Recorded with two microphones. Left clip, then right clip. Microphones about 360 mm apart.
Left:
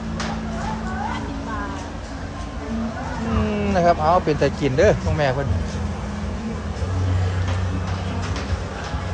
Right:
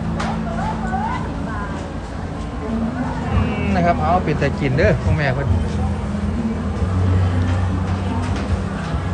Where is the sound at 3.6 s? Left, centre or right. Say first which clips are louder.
Left 1 dB; centre.